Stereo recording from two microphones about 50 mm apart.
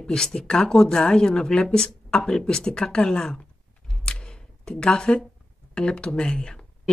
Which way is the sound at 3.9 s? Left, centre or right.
Centre.